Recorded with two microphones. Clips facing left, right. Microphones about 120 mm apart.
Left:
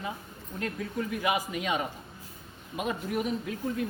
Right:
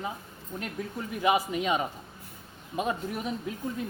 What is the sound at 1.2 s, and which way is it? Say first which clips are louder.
Speech: right 6 dB; 30° right (ahead or behind).